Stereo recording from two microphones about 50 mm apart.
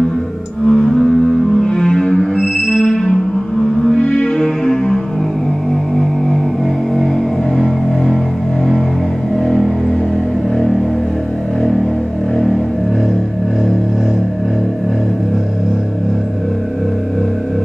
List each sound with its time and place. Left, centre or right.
0.7 s music: centre
4.0 s music: left
4.4 s music: centre
9.5 s music: centre